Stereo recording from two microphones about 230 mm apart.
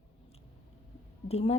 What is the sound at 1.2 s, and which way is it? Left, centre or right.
Speech, left.